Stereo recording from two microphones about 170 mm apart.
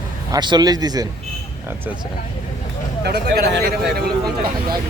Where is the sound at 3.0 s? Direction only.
70° right (ahead or behind).